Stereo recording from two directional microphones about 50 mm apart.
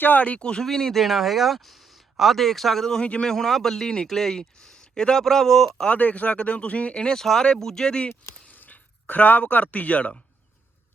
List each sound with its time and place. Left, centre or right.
0.0 s speech: left
0.3 s speech: left
0.6 s speech: centre
3.0 s speech: centre
3.3 s speech: centre
5.9 s speech: left
8.5 s speech: left